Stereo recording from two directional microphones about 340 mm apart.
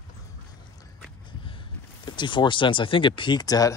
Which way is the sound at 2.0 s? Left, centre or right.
Centre.